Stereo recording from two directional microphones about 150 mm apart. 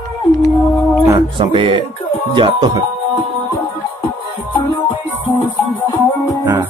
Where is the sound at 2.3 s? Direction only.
30° right (ahead or behind).